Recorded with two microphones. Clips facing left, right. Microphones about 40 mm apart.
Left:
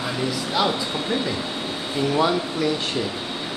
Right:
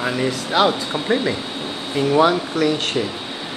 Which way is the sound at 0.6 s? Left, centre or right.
Right.